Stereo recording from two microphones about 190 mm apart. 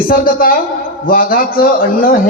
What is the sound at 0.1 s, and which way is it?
A man's voice, 50° left (ahead or behind).